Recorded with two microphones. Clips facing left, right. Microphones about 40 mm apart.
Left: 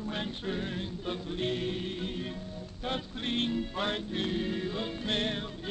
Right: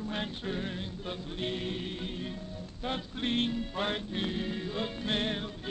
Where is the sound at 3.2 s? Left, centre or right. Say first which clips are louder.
Right 2 dB; centre.